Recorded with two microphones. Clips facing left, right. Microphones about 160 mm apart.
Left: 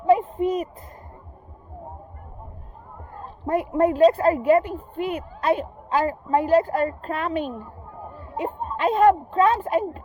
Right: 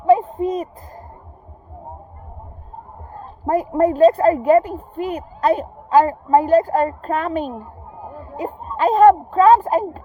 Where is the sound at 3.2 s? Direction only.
35° right (ahead or behind).